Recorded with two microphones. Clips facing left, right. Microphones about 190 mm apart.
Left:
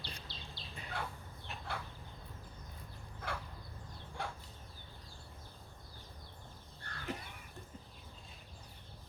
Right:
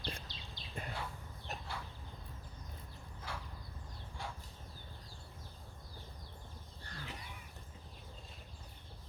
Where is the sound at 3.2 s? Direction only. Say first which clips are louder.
Left 4 dB; 60° left (ahead or behind).